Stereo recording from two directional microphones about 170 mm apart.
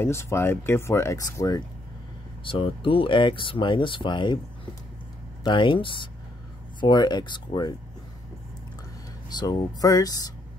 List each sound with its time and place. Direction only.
0.0 s speech: 15° left (ahead or behind)
2.4 s speech: 30° left (ahead or behind)
5.4 s speech: 30° left (ahead or behind)
9.3 s speech: 25° left (ahead or behind)